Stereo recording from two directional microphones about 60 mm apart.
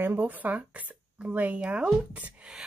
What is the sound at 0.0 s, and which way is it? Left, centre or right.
Speech, right.